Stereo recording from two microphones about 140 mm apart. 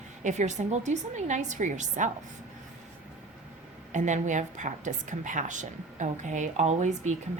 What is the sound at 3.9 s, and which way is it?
A woman's voice, 60° right (ahead or behind).